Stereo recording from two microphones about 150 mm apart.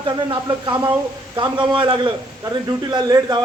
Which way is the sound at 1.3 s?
30° right (ahead or behind).